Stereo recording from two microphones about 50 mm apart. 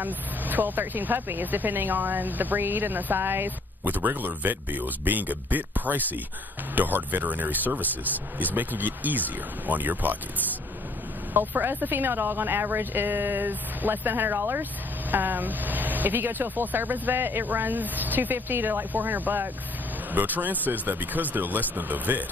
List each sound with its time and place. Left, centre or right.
0.0 s speech: right
11.3 s a woman's voice: right